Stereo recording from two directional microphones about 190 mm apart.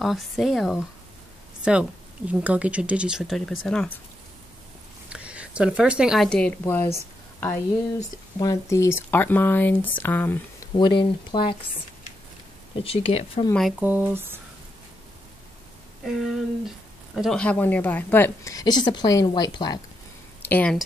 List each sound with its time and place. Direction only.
0.0 s speech: centre (ahead or behind)
5.1 s speech: 5° right (ahead or behind); by 10.7 s 10° left (ahead or behind)
10.7 s speech: 25° left (ahead or behind)
12.8 s speech: 30° left (ahead or behind)
13.6 s speech: 5° right (ahead or behind)
16.0 s speech: centre (ahead or behind); by 19.8 s 20° left (ahead or behind)
20.4 s speech: 10° left (ahead or behind)